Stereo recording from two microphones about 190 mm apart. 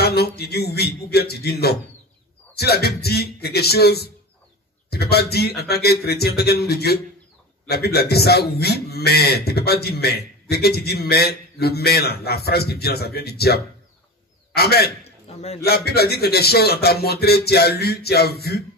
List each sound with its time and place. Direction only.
0.0 s a man's voice: 55° left (ahead or behind)
15.2 s a man's voice: 35° left (ahead or behind)
15.6 s a man's voice: 55° left (ahead or behind)